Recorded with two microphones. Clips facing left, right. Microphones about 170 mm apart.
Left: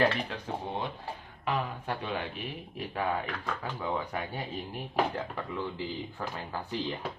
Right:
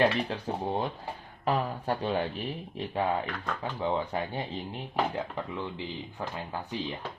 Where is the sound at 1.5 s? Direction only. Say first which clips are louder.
Right 4 dB; 35° right (ahead or behind); by 6.7 s 20° right (ahead or behind).